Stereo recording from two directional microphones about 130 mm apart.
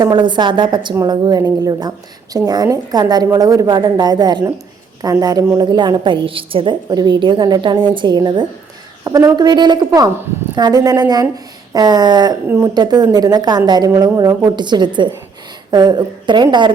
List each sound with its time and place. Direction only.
0.0 s a woman's voice: 35° right (ahead or behind)